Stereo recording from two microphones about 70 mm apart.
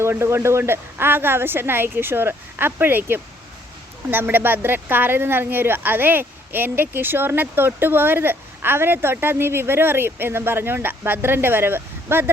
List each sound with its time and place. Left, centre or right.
0.0 s speech: right